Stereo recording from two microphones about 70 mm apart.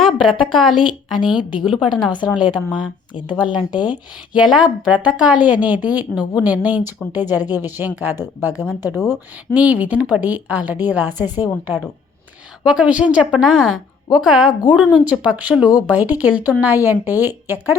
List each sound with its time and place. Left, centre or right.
0.0 s a woman's voice: centre; by 11.8 s right
12.8 s a woman's voice: centre